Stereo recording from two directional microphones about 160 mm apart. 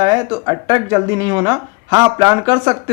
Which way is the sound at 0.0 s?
25° right (ahead or behind).